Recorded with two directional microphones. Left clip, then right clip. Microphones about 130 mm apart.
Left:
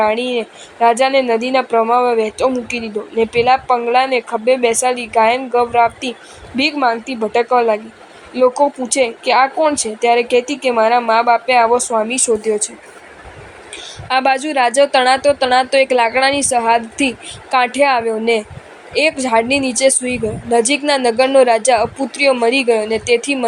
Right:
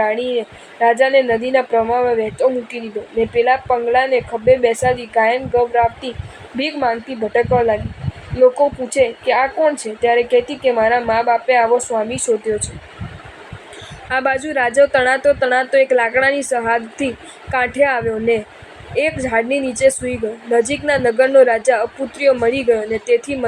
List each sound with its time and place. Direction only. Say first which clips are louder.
0.0 s a woman's voice: left 2 dB; 35° left (ahead or behind)
14.1 s a woman's voice: left 3 dB; 25° left (ahead or behind)